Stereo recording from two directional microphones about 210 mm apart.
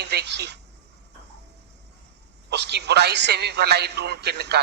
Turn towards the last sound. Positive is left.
turn(degrees=-50)  # may be behind; listen again after turning